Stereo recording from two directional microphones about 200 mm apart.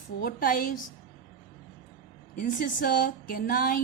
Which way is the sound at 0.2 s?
45° left (ahead or behind).